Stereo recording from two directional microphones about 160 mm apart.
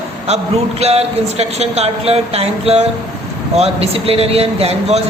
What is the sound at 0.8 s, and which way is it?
Speech, 40° right (ahead or behind).